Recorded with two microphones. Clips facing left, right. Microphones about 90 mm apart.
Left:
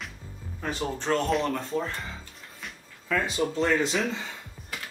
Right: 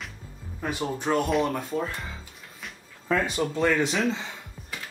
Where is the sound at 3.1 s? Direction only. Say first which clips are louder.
Right 3 dB; 35° right (ahead or behind).